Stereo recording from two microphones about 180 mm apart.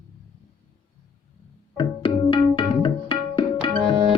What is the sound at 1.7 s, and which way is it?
Tabla, 30° left (ahead or behind).